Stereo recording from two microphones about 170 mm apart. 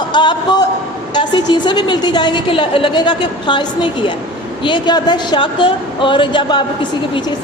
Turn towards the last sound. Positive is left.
turn(degrees=30)  # may be behind; listen again after turning